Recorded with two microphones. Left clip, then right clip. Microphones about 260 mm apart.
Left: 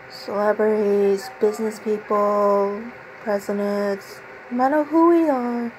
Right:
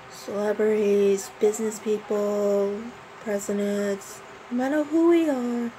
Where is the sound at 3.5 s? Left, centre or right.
Centre.